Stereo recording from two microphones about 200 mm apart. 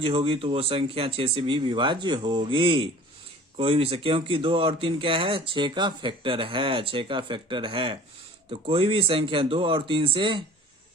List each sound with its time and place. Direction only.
0.0 s speech: 25° right (ahead or behind)